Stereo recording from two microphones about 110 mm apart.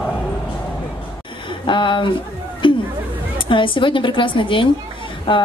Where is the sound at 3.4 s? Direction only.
50° left (ahead or behind).